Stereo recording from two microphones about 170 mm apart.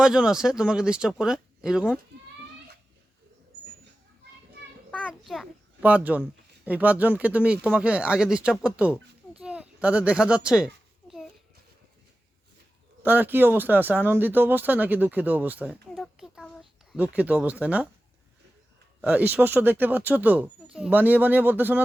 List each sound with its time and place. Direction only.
0.0 s speech: 5° right (ahead or behind)
4.9 s babbling: 5° left (ahead or behind); by 6.2 s 10° right (ahead or behind)
6.7 s a child's voice: 10° right (ahead or behind)
13.0 s speech: 10° right (ahead or behind)
19.0 s speech: 10° right (ahead or behind)